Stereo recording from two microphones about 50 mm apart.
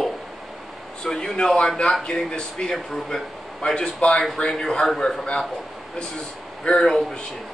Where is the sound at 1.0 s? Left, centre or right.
Centre.